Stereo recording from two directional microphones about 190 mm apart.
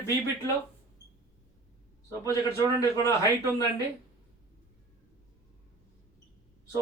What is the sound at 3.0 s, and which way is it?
Speech, 15° left (ahead or behind).